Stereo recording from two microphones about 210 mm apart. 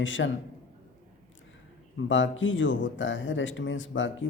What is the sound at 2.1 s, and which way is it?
Speech, 65° left (ahead or behind).